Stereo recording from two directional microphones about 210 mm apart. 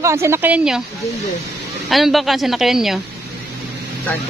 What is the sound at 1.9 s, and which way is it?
A woman's voice, centre (ahead or behind).